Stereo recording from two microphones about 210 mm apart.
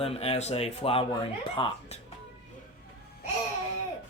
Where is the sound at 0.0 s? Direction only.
30° left (ahead or behind).